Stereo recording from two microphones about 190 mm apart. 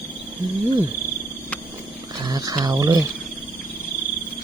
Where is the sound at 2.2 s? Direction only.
20° right (ahead or behind).